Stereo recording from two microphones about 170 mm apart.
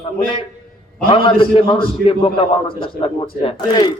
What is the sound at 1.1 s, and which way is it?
A man's voice, 30° left (ahead or behind).